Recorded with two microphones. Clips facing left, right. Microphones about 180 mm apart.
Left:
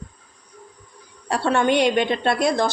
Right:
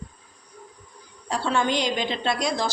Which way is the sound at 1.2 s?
65° left (ahead or behind).